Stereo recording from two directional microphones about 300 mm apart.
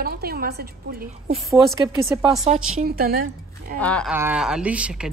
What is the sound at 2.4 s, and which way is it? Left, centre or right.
A woman's voice, right.